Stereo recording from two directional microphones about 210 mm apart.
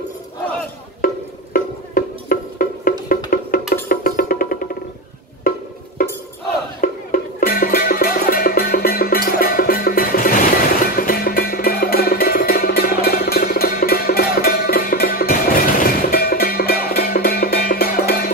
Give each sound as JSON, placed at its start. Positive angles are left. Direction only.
{"t": 1.0, "sound": "music", "side_deg": 40}
{"t": 6.8, "sound": "music", "side_deg": 40}